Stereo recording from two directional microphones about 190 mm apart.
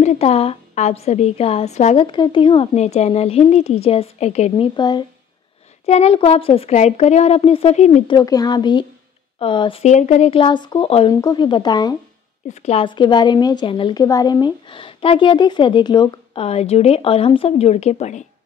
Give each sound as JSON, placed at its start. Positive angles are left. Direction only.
{"t": 0.0, "sound": "speech", "side_deg": 35}
{"t": 2.0, "sound": "speech", "side_deg": 25}
{"t": 4.7, "sound": "a woman's voice", "side_deg": 25}
{"t": 5.9, "sound": "speech", "side_deg": 35}
{"t": 8.1, "sound": "a woman's voice", "side_deg": 20}
{"t": 12.4, "sound": "a woman's voice", "side_deg": 35}